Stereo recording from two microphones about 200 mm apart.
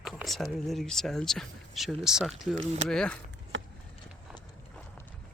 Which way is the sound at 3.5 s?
70° right (ahead or behind).